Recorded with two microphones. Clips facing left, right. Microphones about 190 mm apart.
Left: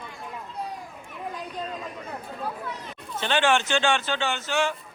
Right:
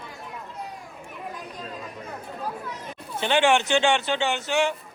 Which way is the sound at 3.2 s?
15° right (ahead or behind).